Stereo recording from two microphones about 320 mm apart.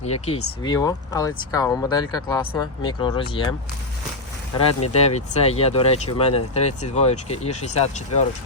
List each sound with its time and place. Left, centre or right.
0.0 s speech: centre
4.8 s speech: centre